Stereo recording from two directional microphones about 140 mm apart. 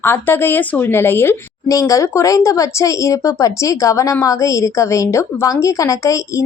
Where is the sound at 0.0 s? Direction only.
15° left (ahead or behind).